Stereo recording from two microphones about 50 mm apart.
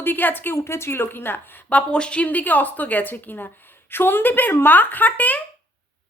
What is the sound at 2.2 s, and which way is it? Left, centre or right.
A woman's voice, left.